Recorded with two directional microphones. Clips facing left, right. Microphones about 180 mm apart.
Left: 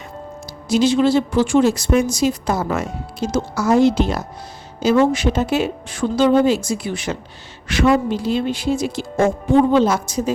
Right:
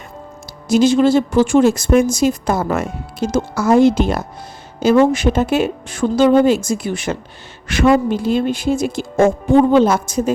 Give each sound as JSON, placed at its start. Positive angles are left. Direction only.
{"t": 0.7, "sound": "speech", "side_deg": -50}